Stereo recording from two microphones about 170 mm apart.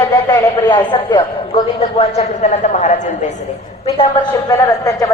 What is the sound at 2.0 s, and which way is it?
Speech, 40° left (ahead or behind).